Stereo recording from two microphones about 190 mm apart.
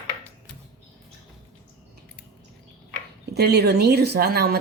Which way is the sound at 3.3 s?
60° right (ahead or behind).